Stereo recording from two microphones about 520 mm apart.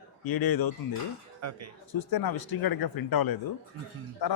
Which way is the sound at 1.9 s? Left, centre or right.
Left.